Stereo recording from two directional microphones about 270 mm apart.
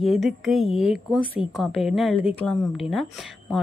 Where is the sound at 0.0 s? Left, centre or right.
Centre.